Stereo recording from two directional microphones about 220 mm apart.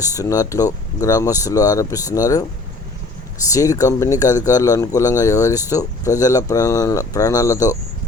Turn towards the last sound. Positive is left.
turn(degrees=15)  # may be behind; listen again after turning